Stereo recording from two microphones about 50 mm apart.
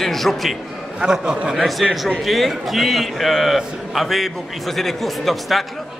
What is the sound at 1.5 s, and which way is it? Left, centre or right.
A man's voice, centre.